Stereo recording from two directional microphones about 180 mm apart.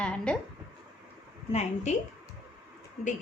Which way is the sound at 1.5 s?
35° left (ahead or behind).